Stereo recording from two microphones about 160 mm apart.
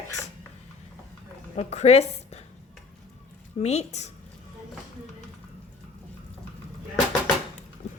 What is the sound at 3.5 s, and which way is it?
Speech, 45° left (ahead or behind).